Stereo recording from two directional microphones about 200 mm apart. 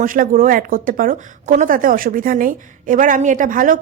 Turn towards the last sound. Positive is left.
turn(degrees=-45)  # may be behind; listen again after turning